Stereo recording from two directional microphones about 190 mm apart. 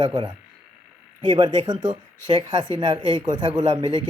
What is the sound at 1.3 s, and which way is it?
Speech, 25° right (ahead or behind).